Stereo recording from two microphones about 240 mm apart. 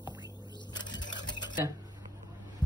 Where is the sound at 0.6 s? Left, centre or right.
Centre.